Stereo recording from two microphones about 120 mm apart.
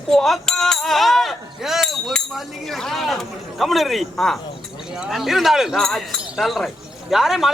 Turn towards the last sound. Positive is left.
turn(degrees=-5)  # may be behind; listen again after turning